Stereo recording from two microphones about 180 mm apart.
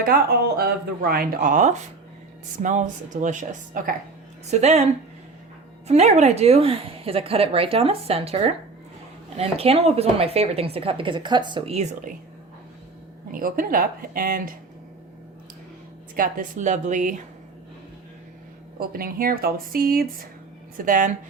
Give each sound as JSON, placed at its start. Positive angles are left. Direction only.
{"t": 0.0, "sound": "speech", "side_deg": -60}
{"t": 5.9, "sound": "speech", "side_deg": -40}
{"t": 13.3, "sound": "speech", "side_deg": -50}
{"t": 16.1, "sound": "speech", "side_deg": -50}
{"t": 18.8, "sound": "speech", "side_deg": -55}